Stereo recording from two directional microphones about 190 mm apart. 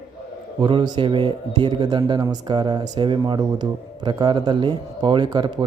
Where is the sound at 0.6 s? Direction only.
25° right (ahead or behind).